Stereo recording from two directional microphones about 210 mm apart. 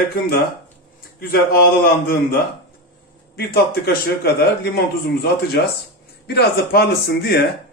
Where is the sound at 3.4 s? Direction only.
45° left (ahead or behind).